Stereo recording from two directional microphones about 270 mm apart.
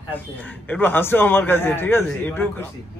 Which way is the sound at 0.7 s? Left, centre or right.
Centre.